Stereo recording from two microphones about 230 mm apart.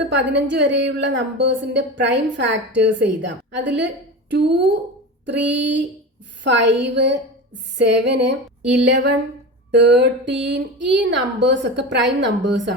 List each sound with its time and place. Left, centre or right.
0.1 s a woman's voice: right